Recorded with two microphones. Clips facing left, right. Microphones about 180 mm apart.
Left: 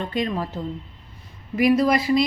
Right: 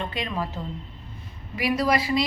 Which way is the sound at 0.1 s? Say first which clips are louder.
Left 5 dB; 40° left (ahead or behind).